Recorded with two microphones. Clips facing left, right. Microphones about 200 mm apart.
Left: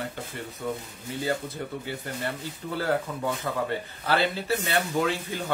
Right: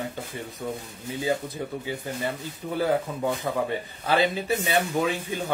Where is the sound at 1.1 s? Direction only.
15° right (ahead or behind).